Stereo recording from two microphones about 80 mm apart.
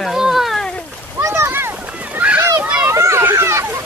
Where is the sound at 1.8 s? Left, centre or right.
Centre.